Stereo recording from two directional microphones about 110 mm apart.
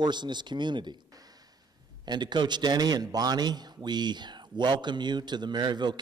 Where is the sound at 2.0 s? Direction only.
40° right (ahead or behind).